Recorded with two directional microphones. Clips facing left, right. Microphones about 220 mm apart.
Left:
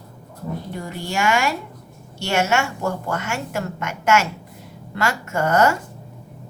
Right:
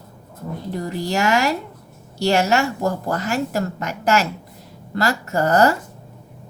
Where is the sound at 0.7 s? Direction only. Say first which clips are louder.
Right 9 dB; 40° right (ahead or behind).